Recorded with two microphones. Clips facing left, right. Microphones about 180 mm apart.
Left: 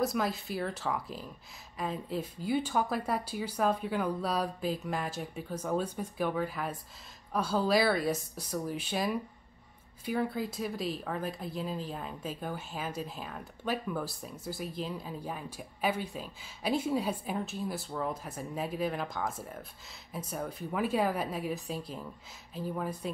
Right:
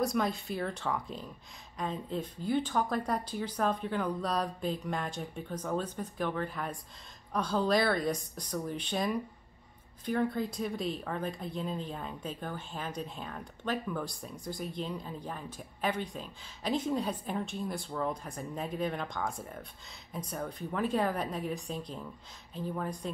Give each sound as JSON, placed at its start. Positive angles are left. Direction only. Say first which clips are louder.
{"t": 0.0, "sound": "speech", "louder": "even", "side_deg": 0}